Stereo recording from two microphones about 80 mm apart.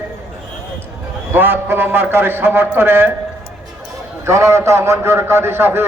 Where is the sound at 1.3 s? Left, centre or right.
Right.